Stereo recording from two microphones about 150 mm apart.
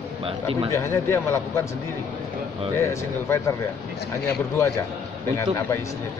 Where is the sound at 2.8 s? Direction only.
20° left (ahead or behind).